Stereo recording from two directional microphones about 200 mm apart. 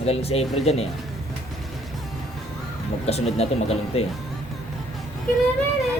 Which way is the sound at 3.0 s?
30° left (ahead or behind).